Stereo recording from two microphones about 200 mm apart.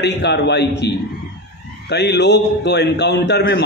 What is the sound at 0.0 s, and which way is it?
Speech, 60° left (ahead or behind).